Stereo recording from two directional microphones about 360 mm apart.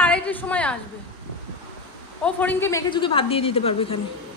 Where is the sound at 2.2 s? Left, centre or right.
Centre.